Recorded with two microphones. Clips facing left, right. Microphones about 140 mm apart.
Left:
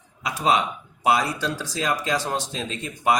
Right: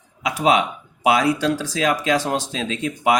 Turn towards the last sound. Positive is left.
turn(degrees=-90)